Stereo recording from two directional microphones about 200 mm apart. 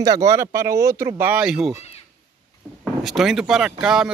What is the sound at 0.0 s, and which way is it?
Speech, 15° right (ahead or behind).